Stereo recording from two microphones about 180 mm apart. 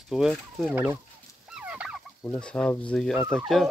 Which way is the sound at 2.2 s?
5° left (ahead or behind).